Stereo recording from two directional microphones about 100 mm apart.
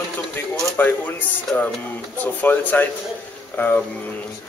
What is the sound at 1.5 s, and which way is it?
Speech, 20° left (ahead or behind).